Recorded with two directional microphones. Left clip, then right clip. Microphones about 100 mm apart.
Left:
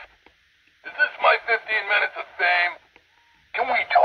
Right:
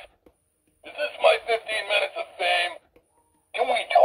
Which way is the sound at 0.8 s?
35° right (ahead or behind).